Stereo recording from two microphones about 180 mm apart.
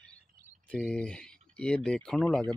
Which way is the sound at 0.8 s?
5° left (ahead or behind).